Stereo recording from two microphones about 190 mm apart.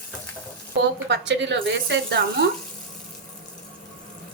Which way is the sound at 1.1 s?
65° right (ahead or behind).